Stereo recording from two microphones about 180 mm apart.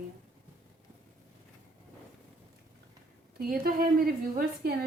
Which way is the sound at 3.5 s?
50° right (ahead or behind).